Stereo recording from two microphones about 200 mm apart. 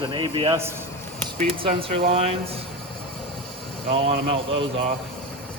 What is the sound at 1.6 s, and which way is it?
Speech, 25° right (ahead or behind).